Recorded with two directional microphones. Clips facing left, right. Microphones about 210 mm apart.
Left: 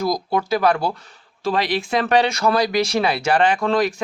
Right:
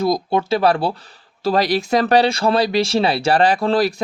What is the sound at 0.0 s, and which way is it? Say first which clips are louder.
Speech: right 3 dB; 25° right (ahead or behind).